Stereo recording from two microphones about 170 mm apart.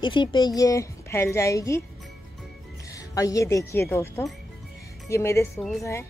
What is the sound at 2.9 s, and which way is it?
A woman's voice, 20° left (ahead or behind).